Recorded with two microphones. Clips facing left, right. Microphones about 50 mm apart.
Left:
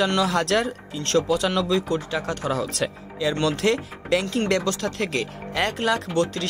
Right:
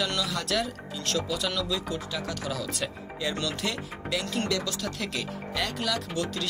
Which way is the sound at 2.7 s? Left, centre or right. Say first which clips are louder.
Left 5 dB; left.